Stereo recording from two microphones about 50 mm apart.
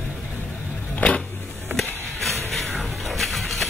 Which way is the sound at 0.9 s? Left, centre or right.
Left.